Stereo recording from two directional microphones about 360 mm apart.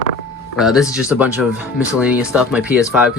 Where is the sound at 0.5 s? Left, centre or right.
Centre.